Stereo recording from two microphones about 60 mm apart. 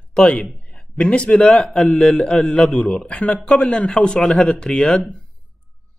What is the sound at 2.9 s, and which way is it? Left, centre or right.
Speech, centre.